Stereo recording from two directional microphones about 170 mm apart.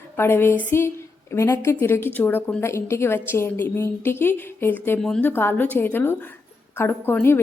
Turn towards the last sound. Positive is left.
turn(degrees=10)  # may be behind; listen again after turning